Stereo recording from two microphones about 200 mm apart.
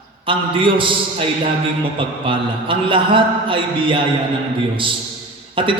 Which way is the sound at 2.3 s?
25° right (ahead or behind).